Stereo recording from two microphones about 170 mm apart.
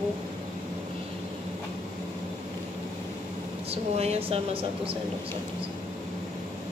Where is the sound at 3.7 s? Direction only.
35° right (ahead or behind).